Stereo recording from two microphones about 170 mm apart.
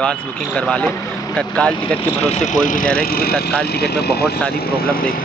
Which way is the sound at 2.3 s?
45° left (ahead or behind).